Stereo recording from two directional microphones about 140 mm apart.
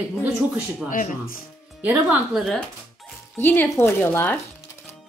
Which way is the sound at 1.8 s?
10° right (ahead or behind).